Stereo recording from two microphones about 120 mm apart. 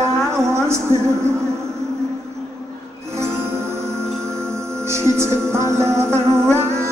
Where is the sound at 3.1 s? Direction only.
20° right (ahead or behind).